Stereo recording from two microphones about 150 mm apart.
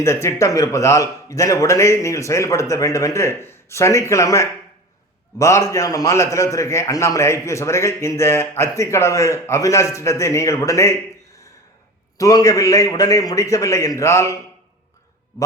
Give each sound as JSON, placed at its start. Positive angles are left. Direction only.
{"t": 0.0, "sound": "a man's voice", "side_deg": 20}
{"t": 12.1, "sound": "a man's voice", "side_deg": 20}